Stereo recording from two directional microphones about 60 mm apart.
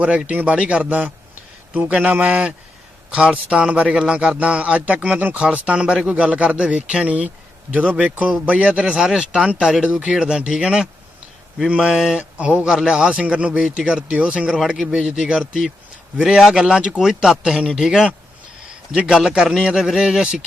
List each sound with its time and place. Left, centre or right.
0.0 s speech: right